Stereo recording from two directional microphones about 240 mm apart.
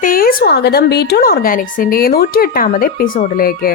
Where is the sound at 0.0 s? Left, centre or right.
Left.